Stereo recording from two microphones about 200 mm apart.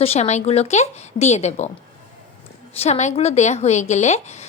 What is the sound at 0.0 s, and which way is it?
Speech, 30° left (ahead or behind).